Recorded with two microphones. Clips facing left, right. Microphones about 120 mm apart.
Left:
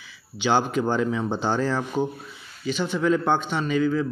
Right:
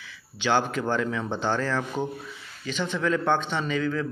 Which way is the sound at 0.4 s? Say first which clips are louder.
Left 3 dB; 15° left (ahead or behind).